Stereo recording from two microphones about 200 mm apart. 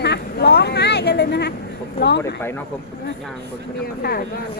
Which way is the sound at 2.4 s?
10° left (ahead or behind).